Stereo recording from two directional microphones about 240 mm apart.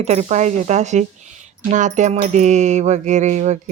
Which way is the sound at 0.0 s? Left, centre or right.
Right.